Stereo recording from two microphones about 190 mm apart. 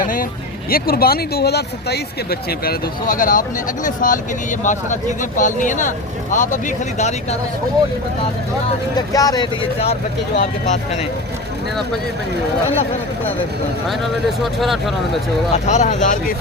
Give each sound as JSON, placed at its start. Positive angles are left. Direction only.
{"t": 0.0, "sound": "vehicle", "side_deg": 45}
{"t": 0.7, "sound": "speech", "side_deg": 50}
{"t": 9.0, "sound": "speech", "side_deg": 20}
{"t": 14.6, "sound": "speech", "side_deg": 0}
{"t": 15.5, "sound": "speech", "side_deg": 35}